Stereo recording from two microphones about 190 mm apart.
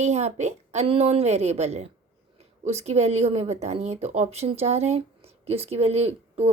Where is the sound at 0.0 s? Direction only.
35° right (ahead or behind).